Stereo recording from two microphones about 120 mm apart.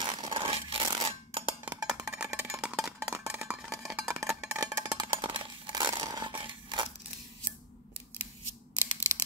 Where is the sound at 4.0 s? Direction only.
20° right (ahead or behind).